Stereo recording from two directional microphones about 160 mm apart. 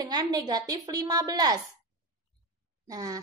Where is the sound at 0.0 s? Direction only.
25° right (ahead or behind).